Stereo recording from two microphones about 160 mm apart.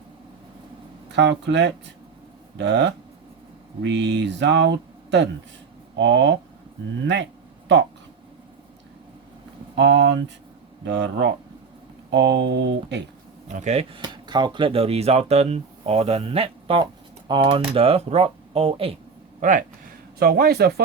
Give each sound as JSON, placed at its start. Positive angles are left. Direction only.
{"t": 1.1, "sound": "speech", "side_deg": -90}
{"t": 9.7, "sound": "speech", "side_deg": -90}
{"t": 13.5, "sound": "speech", "side_deg": -45}
{"t": 14.0, "sound": "speech", "side_deg": -30}
{"t": 19.4, "sound": "speech", "side_deg": -55}
{"t": 20.1, "sound": "a man's voice", "side_deg": -75}